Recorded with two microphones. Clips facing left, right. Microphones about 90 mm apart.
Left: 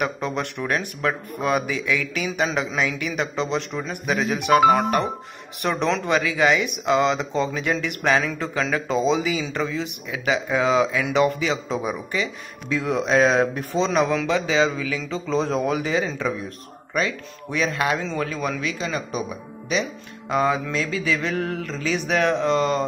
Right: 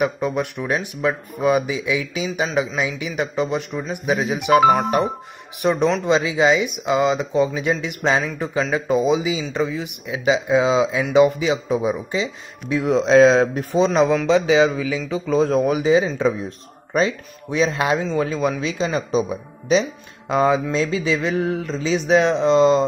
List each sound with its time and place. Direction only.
0.3 s speech: 15° right (ahead or behind)
5.6 s speech: 15° right (ahead or behind)
15.6 s speech: 15° right (ahead or behind)